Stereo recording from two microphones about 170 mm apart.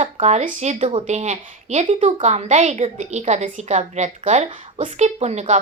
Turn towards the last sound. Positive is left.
turn(degrees=-40)  # may be behind; listen again after turning